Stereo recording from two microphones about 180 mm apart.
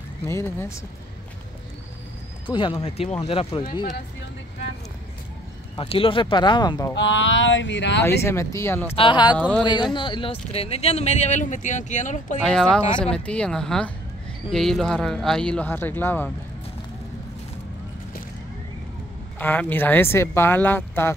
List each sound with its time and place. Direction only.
0.3 s speech: 15° left (ahead or behind)
2.4 s speech: 25° left (ahead or behind)
5.8 s speech: 30° left (ahead or behind)
7.0 s speech: 90° left
8.2 s speech: 15° left (ahead or behind)
8.9 s speech: 30° left (ahead or behind); by 12.4 s 45° left (ahead or behind)
12.4 s speech: 5° left (ahead or behind)
19.3 s speech: 10° left (ahead or behind)